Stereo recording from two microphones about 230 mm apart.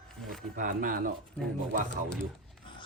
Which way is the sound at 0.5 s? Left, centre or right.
Right.